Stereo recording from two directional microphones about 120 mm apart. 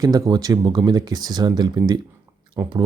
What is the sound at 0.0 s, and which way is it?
Speech, 30° right (ahead or behind).